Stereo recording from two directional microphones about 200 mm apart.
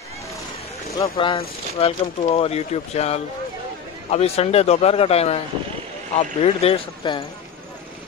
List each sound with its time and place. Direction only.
0.9 s a man's voice: 20° left (ahead or behind)